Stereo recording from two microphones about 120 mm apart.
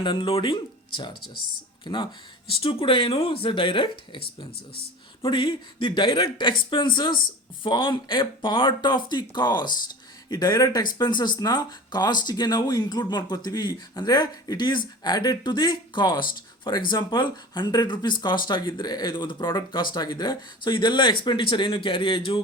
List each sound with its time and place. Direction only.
0.0 s speech: 45° left (ahead or behind)